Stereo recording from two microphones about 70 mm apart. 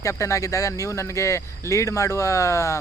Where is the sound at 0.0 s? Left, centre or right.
Left.